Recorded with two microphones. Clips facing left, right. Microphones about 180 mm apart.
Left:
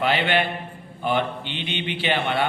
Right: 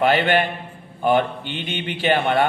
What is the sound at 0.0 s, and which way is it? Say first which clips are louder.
A man's voice: right 4 dB; 45° right (ahead or behind).